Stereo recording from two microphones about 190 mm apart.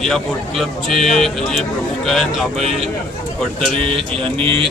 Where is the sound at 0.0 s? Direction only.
Centre (ahead or behind).